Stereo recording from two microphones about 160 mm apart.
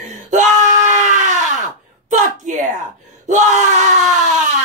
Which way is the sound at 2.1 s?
50° right (ahead or behind).